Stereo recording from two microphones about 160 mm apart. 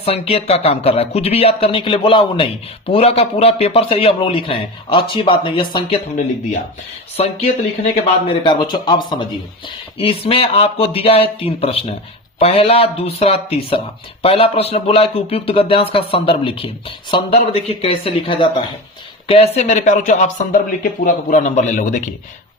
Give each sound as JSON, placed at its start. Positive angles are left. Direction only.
{"t": 0.0, "sound": "speech", "side_deg": 35}
{"t": 19.3, "sound": "speech", "side_deg": 40}